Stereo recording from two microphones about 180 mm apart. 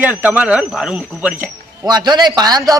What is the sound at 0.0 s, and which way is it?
Speech, 10° right (ahead or behind).